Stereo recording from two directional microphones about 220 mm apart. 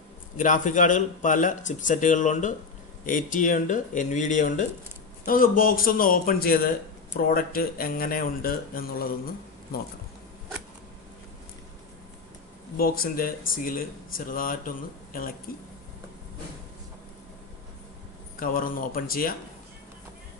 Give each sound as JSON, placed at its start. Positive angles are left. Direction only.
{"t": 0.4, "sound": "speech", "side_deg": 35}
{"t": 12.7, "sound": "speech", "side_deg": 40}
{"t": 18.4, "sound": "speech", "side_deg": 40}